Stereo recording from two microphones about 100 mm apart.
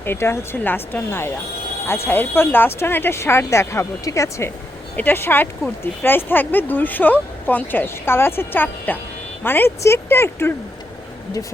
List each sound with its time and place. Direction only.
0.0 s speech: 25° left (ahead or behind)